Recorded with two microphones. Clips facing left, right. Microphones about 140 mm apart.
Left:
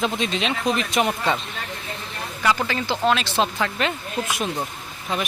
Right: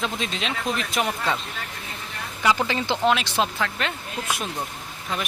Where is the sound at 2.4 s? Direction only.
15° right (ahead or behind).